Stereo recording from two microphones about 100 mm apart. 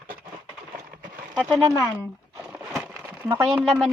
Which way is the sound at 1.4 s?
Centre (ahead or behind).